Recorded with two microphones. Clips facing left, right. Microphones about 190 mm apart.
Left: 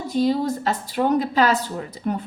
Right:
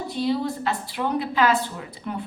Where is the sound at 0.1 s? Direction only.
45° left (ahead or behind).